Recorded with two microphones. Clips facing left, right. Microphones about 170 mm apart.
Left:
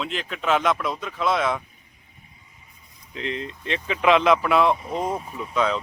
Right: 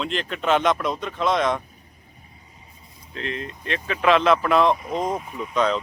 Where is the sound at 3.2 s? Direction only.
20° left (ahead or behind).